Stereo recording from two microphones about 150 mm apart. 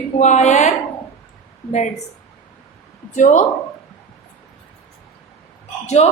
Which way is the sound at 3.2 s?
55° left (ahead or behind).